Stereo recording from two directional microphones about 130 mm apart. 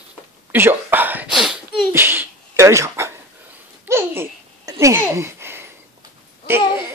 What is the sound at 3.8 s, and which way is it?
Babbling, 20° right (ahead or behind).